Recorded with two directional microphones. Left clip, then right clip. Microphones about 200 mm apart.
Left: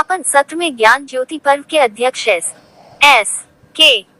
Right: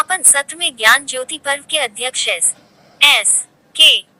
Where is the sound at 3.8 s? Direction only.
5° right (ahead or behind).